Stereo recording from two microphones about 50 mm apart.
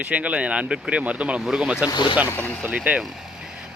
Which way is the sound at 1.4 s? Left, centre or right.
Centre.